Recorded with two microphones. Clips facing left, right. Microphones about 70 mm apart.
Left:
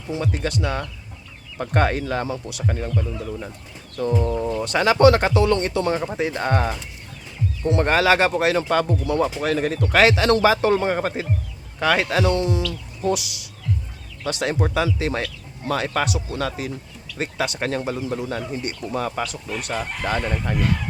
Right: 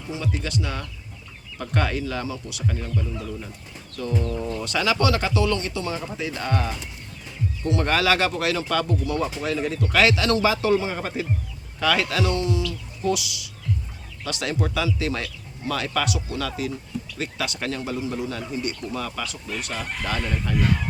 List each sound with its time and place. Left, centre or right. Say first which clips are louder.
0.1 s speech: left 4 dB; left
4.1 s speech: left 4 dB; left
4.6 s speech: left 8 dB; left
11.8 s speech: left 3 dB; left
19.7 s speech: left 5 dB; left